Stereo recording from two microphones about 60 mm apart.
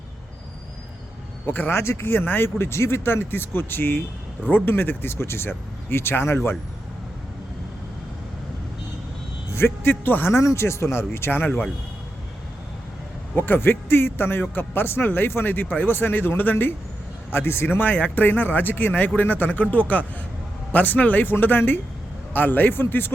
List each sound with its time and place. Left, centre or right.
1.5 s speech: left
1.7 s speech: left
9.5 s speech: left
10.3 s speech: left
13.3 s speech: left
20.7 s speech: left